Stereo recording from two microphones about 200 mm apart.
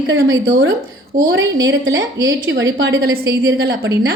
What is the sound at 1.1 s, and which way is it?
Speech, 15° right (ahead or behind).